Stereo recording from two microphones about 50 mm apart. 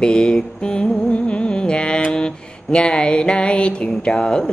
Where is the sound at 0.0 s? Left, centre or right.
Centre.